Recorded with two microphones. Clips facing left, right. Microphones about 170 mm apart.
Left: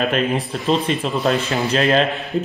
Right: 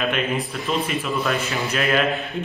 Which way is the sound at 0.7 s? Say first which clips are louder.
Left 6 dB; 30° left (ahead or behind).